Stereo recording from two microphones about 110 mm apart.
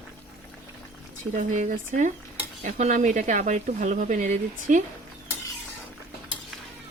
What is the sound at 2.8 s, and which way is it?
Speech, 90° right.